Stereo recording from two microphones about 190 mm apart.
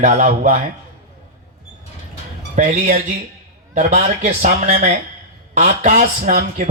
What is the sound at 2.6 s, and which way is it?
A man's voice, 40° right (ahead or behind).